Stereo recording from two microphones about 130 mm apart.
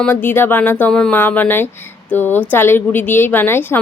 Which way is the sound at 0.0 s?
15° left (ahead or behind).